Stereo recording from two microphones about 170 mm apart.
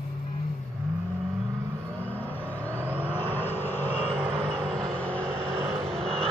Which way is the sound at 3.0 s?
10° left (ahead or behind).